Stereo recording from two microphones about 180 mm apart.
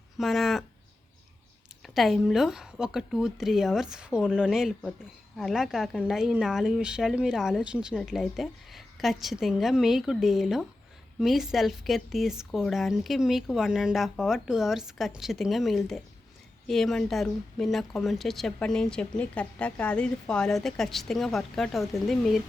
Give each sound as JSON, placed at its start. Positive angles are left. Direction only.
{"t": 0.2, "sound": "speech", "side_deg": 0}
{"t": 1.8, "sound": "speech", "side_deg": 0}